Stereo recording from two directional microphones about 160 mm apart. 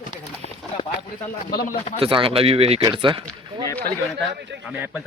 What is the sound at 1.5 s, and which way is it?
Speech, 75° left (ahead or behind).